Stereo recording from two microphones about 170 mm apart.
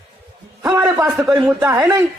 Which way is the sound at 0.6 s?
15° right (ahead or behind).